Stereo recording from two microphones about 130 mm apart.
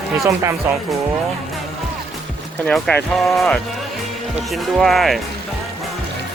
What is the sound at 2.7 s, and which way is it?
Speech, 5° left (ahead or behind).